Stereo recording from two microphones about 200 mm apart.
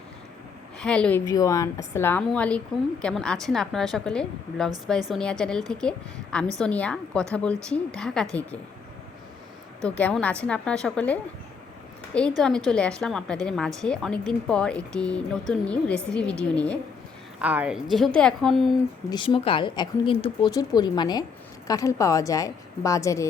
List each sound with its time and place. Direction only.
0.8 s a woman's voice: 5° left (ahead or behind)
9.8 s speech: 5° left (ahead or behind)
12.4 s a woman's voice: 5° left (ahead or behind)
17.4 s speech: 5° right (ahead or behind)
19.1 s a woman's voice: 25° left (ahead or behind)